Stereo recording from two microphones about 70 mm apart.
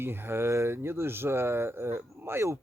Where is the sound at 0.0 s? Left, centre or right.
Right.